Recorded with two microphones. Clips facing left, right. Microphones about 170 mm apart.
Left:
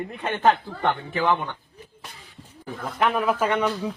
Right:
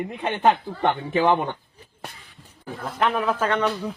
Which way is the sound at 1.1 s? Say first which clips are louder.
Right 5 dB; 30° right (ahead or behind).